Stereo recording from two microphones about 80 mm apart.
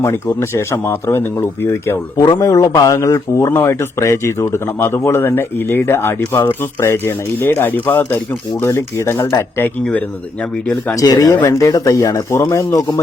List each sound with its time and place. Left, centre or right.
0.0 s speech: left
2.1 s a man's voice: left
2.4 s speech: left
8.6 s speech: left
10.9 s speech: left
11.5 s speech: left